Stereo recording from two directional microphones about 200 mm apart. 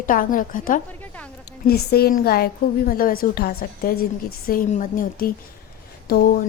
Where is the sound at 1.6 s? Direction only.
50° left (ahead or behind).